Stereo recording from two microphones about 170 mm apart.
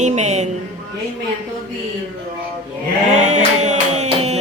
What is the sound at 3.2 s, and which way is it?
Music, 45° right (ahead or behind).